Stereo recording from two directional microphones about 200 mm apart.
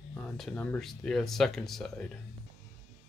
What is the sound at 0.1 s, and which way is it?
Speech, 5° left (ahead or behind).